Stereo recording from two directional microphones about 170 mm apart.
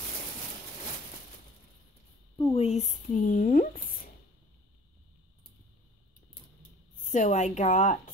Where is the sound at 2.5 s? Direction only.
40° left (ahead or behind).